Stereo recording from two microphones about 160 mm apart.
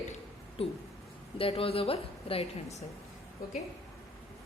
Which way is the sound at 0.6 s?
40° left (ahead or behind).